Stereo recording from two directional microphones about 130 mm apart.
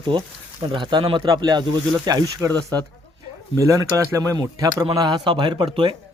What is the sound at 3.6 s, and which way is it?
Speech, 25° right (ahead or behind).